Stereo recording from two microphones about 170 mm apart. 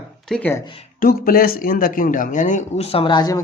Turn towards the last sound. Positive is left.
turn(degrees=25)  # may be behind; listen again after turning